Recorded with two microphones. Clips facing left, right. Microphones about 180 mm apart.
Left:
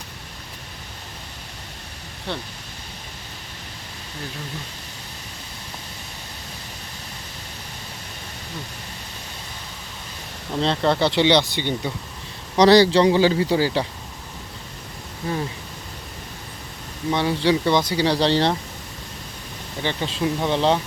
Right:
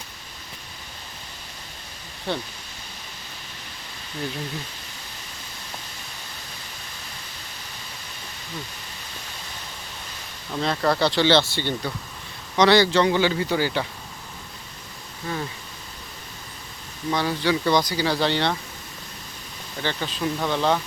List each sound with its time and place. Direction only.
2.3 s speech: centre (ahead or behind)
10.6 s speech: 25° left (ahead or behind)
12.5 s a man's voice: 35° left (ahead or behind)
15.3 s a man's voice: 35° left (ahead or behind)
17.1 s speech: 25° left (ahead or behind)
19.8 s speech: 25° left (ahead or behind)